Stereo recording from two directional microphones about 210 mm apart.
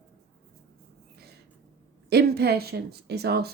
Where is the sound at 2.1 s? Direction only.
50° right (ahead or behind).